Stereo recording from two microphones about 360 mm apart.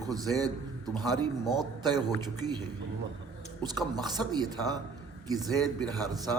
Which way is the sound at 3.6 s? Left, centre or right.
Centre.